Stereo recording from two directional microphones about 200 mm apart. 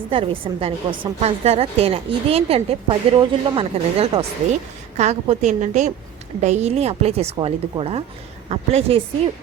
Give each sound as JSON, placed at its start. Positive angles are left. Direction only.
{"t": 0.1, "sound": "a woman's voice", "side_deg": -30}